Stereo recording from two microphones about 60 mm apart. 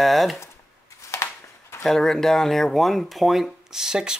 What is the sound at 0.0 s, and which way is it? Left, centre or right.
Speech, centre.